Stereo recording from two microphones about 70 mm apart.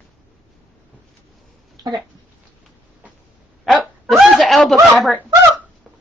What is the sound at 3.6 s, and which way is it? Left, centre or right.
Dog, centre.